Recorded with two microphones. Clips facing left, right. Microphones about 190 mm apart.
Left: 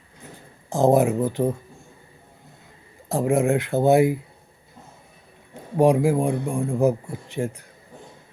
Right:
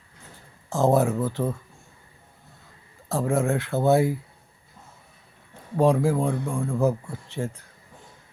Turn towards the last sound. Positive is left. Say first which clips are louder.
# left 4 dB
turn(degrees=15)  # may be behind; listen again after turning